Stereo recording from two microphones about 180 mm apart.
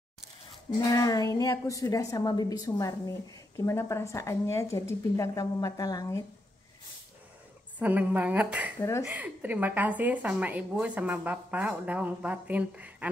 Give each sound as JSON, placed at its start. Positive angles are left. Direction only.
{"t": 0.7, "sound": "a woman's voice", "side_deg": 20}
{"t": 7.8, "sound": "a woman's voice", "side_deg": -10}